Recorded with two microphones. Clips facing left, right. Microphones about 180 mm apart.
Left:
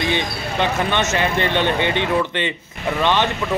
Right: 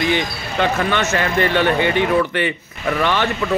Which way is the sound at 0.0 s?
20° left (ahead or behind).